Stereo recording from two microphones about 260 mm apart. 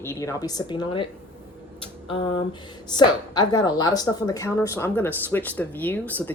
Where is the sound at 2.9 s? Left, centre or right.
Centre.